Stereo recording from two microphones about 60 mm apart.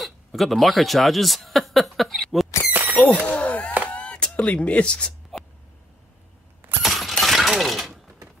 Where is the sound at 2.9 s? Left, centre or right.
Left.